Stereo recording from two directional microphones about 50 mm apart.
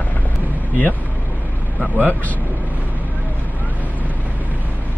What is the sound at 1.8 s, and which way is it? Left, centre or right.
Speech, left.